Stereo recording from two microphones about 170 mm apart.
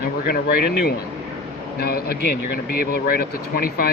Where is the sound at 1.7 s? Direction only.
65° left (ahead or behind).